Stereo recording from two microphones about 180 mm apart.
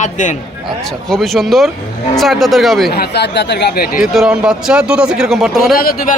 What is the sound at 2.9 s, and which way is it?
Speech, 65° left (ahead or behind).